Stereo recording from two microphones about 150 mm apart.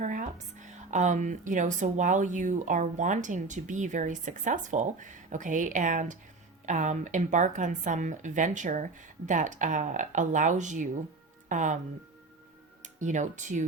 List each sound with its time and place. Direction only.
0.0 s a woman's voice: 55° right (ahead or behind)
12.8 s speech: 55° right (ahead or behind)